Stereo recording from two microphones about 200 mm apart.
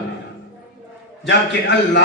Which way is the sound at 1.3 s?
60° left (ahead or behind).